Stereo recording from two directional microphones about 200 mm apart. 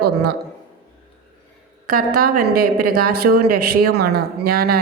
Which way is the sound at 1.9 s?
45° right (ahead or behind).